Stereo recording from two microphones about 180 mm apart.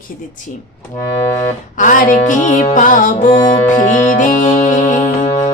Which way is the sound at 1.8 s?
45° left (ahead or behind).